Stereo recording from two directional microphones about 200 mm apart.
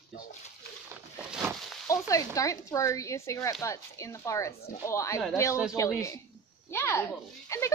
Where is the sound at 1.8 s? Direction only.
15° left (ahead or behind).